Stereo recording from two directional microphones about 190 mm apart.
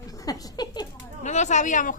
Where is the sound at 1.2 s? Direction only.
40° left (ahead or behind).